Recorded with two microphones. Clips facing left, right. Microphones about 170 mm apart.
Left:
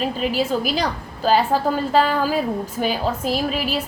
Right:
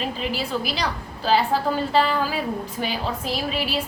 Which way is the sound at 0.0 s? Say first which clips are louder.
Left 5 dB; 45° left (ahead or behind).